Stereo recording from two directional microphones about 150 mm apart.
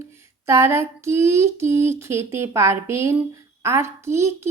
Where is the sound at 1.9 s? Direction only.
20° right (ahead or behind).